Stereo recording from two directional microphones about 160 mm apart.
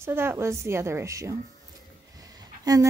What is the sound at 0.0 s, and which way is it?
Speech, 15° right (ahead or behind).